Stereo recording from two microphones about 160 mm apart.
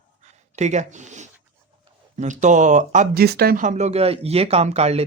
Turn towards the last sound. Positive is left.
turn(degrees=-40)  # may be behind; listen again after turning